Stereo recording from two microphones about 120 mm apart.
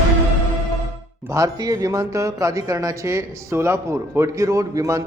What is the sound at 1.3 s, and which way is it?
Speech, 30° right (ahead or behind).